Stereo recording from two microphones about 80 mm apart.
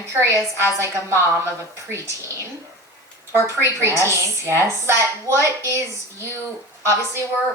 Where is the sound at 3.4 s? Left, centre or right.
Right.